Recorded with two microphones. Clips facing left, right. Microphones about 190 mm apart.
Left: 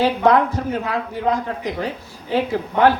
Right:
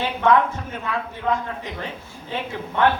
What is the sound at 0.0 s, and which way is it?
A man's voice, 35° left (ahead or behind).